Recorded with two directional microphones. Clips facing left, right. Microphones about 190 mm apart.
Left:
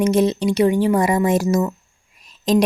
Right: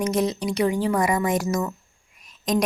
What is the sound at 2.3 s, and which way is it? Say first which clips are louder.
Whispering: left 6 dB; 30° left (ahead or behind).